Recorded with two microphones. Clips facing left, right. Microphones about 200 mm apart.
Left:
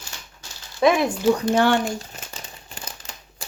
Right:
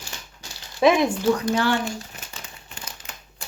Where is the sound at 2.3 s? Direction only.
35° left (ahead or behind).